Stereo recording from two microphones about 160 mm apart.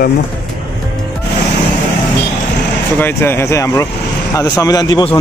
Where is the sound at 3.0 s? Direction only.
15° left (ahead or behind).